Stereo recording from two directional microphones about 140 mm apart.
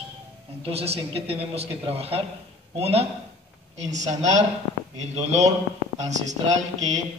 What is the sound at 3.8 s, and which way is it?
Speech, 55° right (ahead or behind).